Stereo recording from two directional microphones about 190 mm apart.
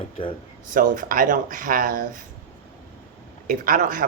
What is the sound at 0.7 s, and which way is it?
Speech, 45° right (ahead or behind).